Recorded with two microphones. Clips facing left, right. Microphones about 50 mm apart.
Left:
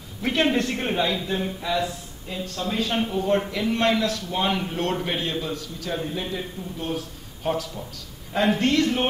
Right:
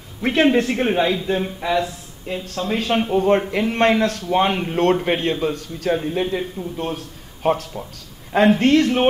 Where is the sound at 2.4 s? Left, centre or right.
Right.